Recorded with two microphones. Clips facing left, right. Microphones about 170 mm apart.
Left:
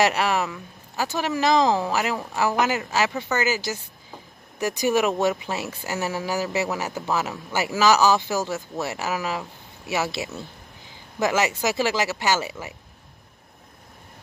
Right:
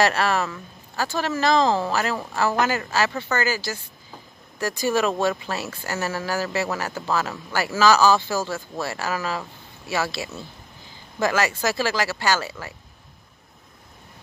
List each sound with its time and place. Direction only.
0.0 s speech: 15° left (ahead or behind)